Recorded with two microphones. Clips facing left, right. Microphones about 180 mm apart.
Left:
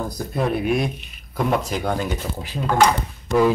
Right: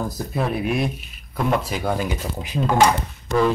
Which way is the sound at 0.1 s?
Centre (ahead or behind).